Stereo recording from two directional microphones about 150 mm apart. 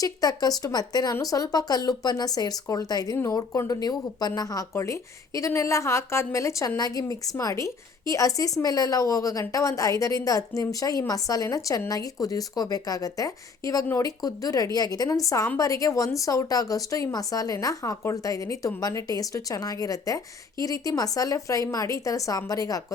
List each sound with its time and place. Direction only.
0.0 s speech: 25° left (ahead or behind)